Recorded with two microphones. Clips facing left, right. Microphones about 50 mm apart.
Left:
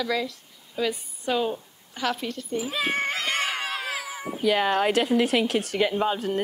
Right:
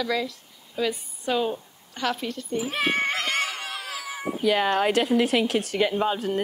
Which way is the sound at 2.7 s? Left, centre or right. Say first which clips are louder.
Right 2 dB; right.